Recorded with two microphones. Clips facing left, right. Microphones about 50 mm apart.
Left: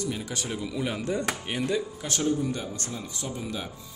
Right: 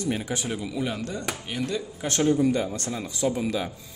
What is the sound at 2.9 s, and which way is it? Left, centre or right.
Speech, right.